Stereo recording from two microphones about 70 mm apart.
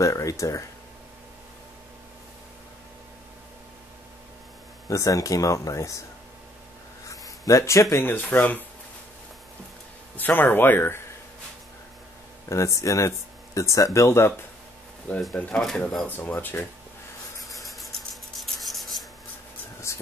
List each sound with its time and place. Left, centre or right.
0.0 s speech: left
4.8 s speech: left
7.1 s a sound: left
8.0 s speech: left
10.1 s speech: left
12.4 s speech: left
15.3 s speech: left
15.6 s speech: centre
16.1 s speech: left
17.6 s rub: centre
19.9 s a sound: left